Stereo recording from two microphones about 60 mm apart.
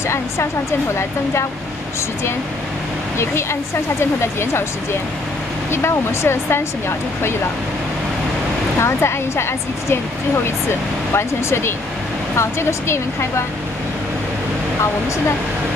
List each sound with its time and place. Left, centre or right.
4.2 s speech: left
5.7 s speech: left
8.8 s speech: left